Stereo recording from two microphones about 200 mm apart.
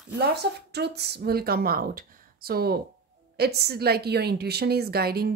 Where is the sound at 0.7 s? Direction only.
55° right (ahead or behind).